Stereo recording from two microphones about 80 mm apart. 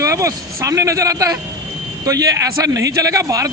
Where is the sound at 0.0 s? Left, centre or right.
Right.